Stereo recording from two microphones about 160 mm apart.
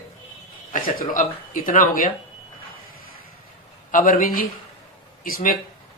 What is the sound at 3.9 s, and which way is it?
Speech, 55° left (ahead or behind).